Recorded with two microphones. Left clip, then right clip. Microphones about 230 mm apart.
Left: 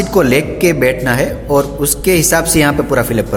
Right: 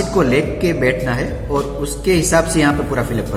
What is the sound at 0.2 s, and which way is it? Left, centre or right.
A man's voice, left.